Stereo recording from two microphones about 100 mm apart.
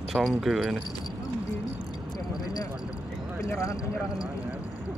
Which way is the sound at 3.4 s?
30° left (ahead or behind).